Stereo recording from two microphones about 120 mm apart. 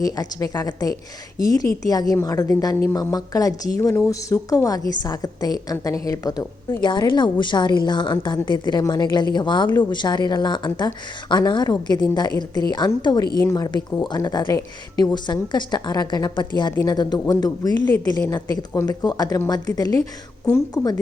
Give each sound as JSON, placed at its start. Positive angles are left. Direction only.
{"t": 0.0, "sound": "a woman's voice", "side_deg": 30}